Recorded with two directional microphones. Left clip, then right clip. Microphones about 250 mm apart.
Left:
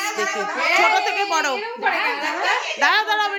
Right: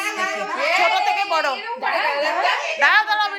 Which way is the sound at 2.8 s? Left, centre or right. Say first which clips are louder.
Right 3 dB; centre.